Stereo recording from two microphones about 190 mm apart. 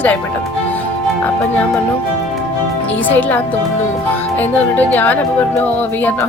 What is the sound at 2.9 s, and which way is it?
Speech, 10° left (ahead or behind).